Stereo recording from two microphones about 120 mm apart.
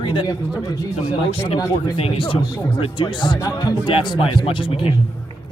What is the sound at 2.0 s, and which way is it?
Speech, 50° left (ahead or behind).